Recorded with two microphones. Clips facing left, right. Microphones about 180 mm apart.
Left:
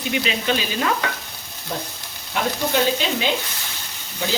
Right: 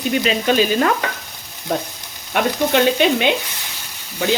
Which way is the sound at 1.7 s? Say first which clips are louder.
Right 7 dB; 70° right (ahead or behind).